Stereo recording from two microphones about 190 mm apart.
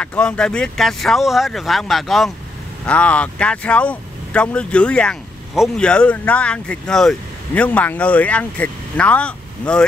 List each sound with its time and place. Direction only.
0.0 s speech: 5° left (ahead or behind)